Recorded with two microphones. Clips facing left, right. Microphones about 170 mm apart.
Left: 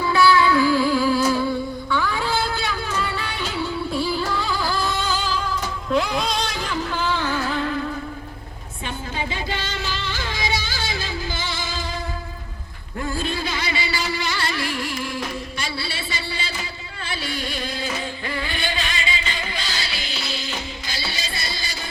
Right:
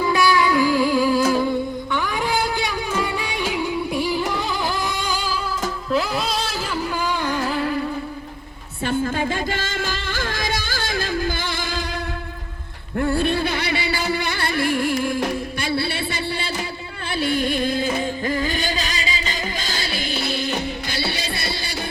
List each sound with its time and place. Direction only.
0.0 s music: 15° right (ahead or behind)
5.9 s a sound: 5° right (ahead or behind)
7.3 s music: 5° right (ahead or behind)
8.8 s music: 50° right (ahead or behind)
13.0 s music: 60° right (ahead or behind)